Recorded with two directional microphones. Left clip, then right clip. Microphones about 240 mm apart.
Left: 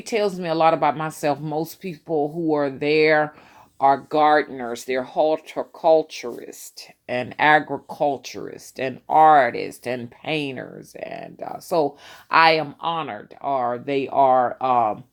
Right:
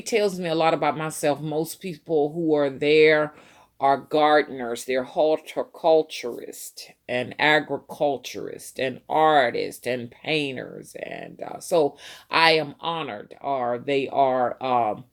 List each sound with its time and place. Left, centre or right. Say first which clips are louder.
0.0 s speech: even; centre